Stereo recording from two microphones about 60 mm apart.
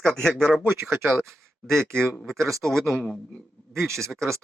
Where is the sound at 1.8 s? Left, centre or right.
Right.